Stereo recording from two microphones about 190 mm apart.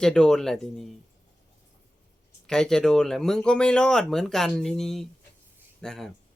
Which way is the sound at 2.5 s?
5° left (ahead or behind).